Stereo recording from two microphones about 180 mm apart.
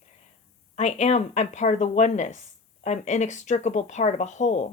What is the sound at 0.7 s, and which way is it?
Speech, 40° left (ahead or behind).